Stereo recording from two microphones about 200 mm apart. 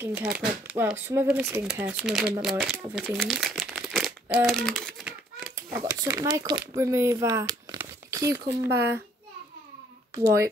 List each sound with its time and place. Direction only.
0.0 s speech: 5° right (ahead or behind)
5.7 s speech: 15° right (ahead or behind)
10.1 s speech: 15° right (ahead or behind)